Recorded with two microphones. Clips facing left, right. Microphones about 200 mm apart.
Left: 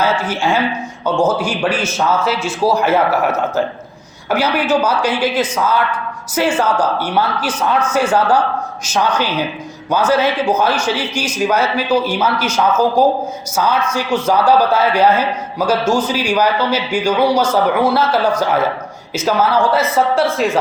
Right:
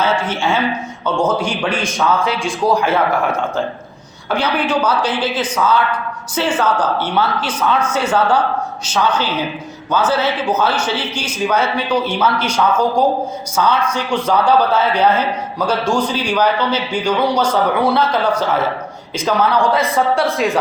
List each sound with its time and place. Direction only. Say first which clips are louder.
0.0 s a man's voice: left 1 dB; 10° left (ahead or behind)
8.8 s a man's voice: left 1 dB; 10° left (ahead or behind)